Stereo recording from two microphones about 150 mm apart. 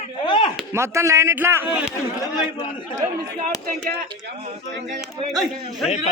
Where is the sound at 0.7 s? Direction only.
20° right (ahead or behind).